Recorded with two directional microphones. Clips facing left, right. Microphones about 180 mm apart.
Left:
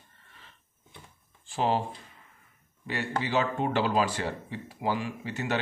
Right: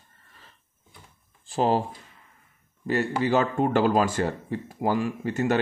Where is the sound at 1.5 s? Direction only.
40° right (ahead or behind).